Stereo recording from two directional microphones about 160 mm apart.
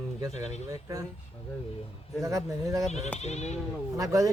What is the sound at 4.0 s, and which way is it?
Speech, 20° right (ahead or behind).